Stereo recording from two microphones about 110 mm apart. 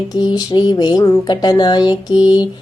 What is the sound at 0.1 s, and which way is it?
Speech, 40° left (ahead or behind).